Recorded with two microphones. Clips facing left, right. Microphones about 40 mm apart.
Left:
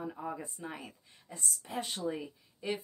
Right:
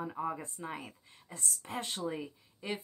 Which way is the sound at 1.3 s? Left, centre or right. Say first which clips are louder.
Even; right.